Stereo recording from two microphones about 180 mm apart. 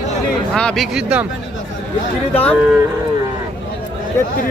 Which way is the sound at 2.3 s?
10° left (ahead or behind).